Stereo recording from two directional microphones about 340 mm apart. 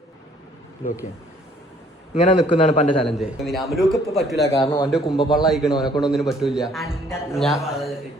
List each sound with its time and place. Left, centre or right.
2.1 s a man's voice: centre
3.1 s speech: centre
4.6 s a man's voice: centre
4.9 s speech: centre